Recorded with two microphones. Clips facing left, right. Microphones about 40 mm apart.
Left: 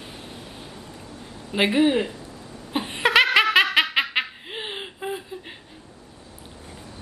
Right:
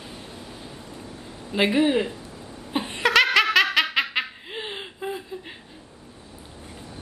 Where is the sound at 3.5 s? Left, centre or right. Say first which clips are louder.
Left 1 dB; left.